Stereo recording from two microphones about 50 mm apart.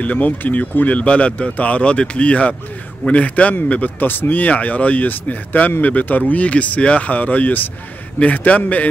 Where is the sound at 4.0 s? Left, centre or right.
Left.